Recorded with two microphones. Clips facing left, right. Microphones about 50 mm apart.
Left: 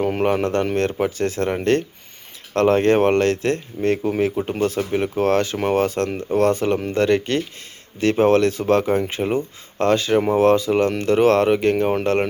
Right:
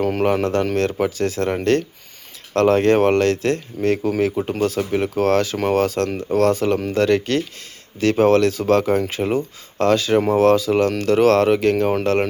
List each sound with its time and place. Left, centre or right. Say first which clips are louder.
0.0 s speech: right 1 dB; centre
1.4 s speech: right 1 dB; centre
2.5 s speech: right 1 dB; centre
4.8 s speech: right 1 dB; centre
5.1 s speech: right 1 dB; centre